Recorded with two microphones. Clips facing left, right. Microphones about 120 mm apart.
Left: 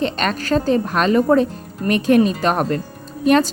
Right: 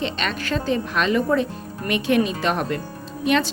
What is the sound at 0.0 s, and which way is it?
A woman's voice, 45° left (ahead or behind).